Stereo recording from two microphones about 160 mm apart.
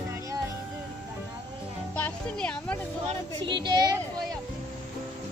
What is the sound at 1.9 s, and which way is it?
Music, 10° left (ahead or behind).